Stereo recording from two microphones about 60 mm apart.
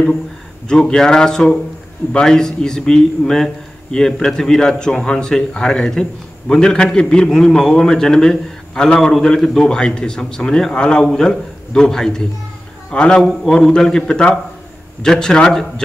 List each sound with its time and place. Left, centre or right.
0.7 s a man's voice: centre